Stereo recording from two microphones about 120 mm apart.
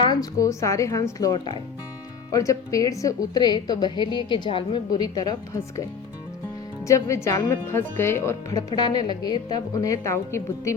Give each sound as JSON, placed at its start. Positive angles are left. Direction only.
{"t": 0.0, "sound": "a woman's voice", "side_deg": 35}
{"t": 4.9, "sound": "a woman's voice", "side_deg": 30}
{"t": 6.8, "sound": "a woman's voice", "side_deg": 25}